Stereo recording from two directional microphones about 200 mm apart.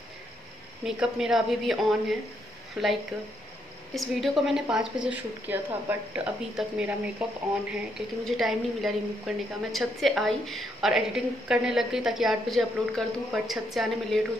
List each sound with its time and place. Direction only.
0.8 s a woman's voice: 5° right (ahead or behind)
8.3 s a woman's voice: centre (ahead or behind)